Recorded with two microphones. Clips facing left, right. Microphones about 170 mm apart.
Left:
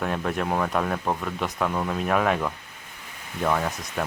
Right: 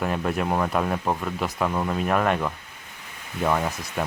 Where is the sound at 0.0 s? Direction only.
5° right (ahead or behind).